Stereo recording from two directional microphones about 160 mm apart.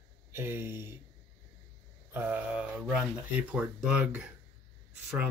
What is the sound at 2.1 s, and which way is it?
Speech, 10° right (ahead or behind).